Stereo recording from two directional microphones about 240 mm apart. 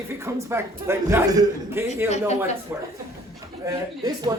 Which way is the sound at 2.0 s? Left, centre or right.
Left.